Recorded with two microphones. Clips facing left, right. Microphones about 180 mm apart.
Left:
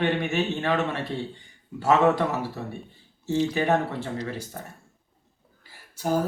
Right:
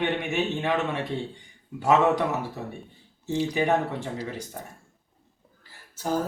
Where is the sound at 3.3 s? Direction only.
15° right (ahead or behind).